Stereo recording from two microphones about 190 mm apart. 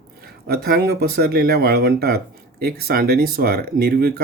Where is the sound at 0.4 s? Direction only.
55° right (ahead or behind).